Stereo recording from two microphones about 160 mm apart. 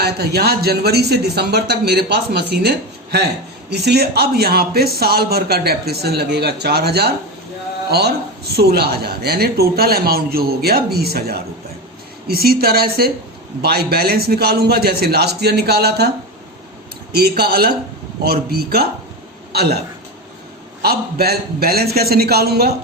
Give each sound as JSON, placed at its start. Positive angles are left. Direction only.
{"t": 0.0, "sound": "speech", "side_deg": -90}
{"t": 17.1, "sound": "speech", "side_deg": -80}
{"t": 20.8, "sound": "speech", "side_deg": -75}